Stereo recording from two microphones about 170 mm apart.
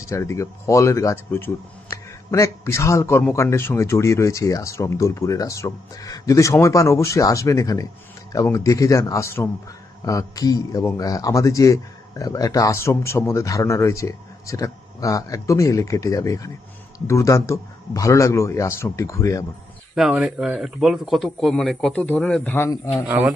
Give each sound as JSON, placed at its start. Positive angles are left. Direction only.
{"t": 0.1, "sound": "speech", "side_deg": 15}
{"t": 20.0, "sound": "speech", "side_deg": -5}
{"t": 23.0, "sound": "a man's voice", "side_deg": -10}